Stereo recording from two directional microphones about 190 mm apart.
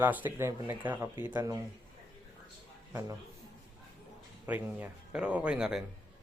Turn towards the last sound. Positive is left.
turn(degrees=-5)  # may be behind; listen again after turning